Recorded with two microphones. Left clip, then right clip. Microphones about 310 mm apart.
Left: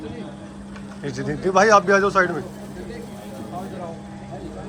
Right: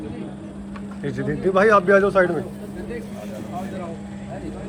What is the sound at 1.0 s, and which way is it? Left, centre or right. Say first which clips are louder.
Speech: right 1 dB; centre.